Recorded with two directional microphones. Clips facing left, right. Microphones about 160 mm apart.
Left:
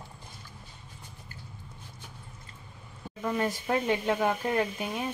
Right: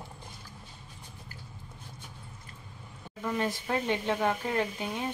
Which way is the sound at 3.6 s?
5° left (ahead or behind).